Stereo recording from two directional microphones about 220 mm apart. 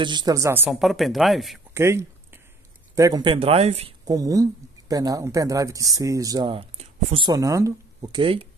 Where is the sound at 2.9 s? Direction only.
15° right (ahead or behind).